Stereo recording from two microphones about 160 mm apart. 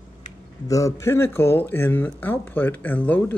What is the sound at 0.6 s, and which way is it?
Speech, 20° left (ahead or behind).